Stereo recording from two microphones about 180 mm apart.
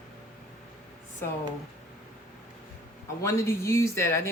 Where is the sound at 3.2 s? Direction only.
15° left (ahead or behind).